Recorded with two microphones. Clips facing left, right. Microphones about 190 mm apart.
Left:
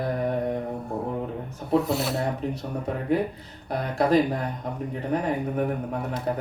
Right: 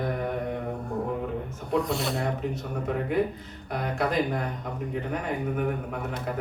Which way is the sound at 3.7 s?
35° left (ahead or behind).